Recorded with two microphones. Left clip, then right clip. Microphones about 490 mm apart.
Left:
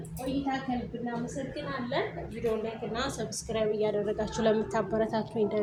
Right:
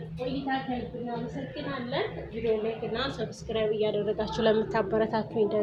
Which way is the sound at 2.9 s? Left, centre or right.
Left.